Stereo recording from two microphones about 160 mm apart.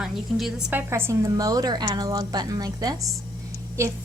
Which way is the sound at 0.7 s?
15° right (ahead or behind).